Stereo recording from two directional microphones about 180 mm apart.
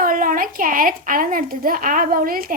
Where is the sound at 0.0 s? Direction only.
50° right (ahead or behind).